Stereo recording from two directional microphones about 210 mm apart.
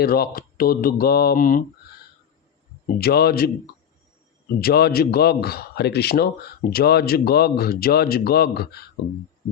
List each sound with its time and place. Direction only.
0.0 s a man's voice: 45° left (ahead or behind)
3.0 s a man's voice: 50° left (ahead or behind)
4.6 s a man's voice: 50° left (ahead or behind)